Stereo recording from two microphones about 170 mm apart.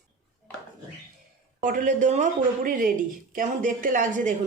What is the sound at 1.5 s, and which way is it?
A woman's voice, 50° right (ahead or behind).